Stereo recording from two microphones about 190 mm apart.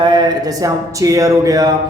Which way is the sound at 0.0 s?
25° right (ahead or behind).